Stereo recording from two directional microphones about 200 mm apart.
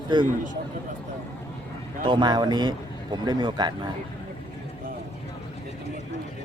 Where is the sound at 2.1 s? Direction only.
20° right (ahead or behind).